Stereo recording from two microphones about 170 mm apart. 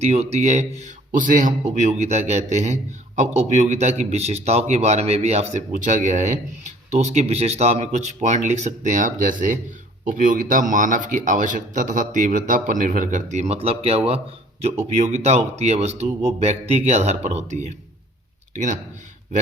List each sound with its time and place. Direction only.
0.0 s a man's voice: 40° right (ahead or behind)